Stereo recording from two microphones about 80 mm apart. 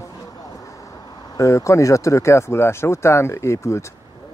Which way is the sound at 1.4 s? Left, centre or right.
Left.